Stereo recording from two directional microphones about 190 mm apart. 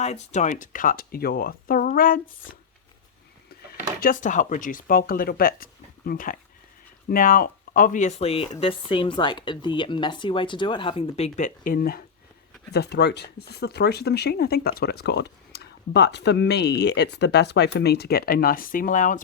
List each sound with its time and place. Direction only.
0.0 s speech: 35° left (ahead or behind)
4.0 s speech: 45° left (ahead or behind)
11.3 s speech: 45° left (ahead or behind)
12.7 s speech: 60° left (ahead or behind); by 19.2 s 45° left (ahead or behind)